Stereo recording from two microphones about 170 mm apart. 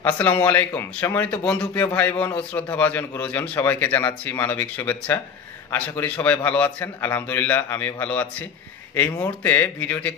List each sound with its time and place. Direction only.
0.0 s a man's voice: 10° left (ahead or behind)